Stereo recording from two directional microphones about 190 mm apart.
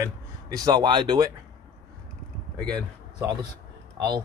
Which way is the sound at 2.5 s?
5° left (ahead or behind).